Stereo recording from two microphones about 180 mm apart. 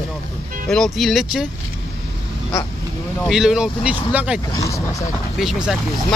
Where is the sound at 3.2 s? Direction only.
Centre (ahead or behind).